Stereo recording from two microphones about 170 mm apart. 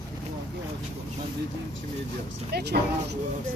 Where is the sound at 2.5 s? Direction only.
75° right (ahead or behind).